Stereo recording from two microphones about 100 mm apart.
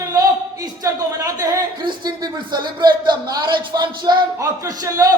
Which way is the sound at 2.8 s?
45° right (ahead or behind).